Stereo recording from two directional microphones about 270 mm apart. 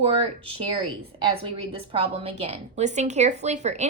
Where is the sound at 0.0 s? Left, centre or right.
Right.